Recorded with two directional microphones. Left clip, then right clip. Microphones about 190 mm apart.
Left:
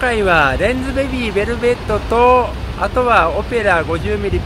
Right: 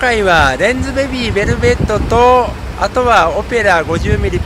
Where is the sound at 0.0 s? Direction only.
15° right (ahead or behind).